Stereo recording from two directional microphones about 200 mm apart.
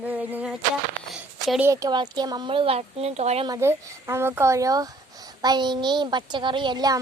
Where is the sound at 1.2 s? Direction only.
5° right (ahead or behind).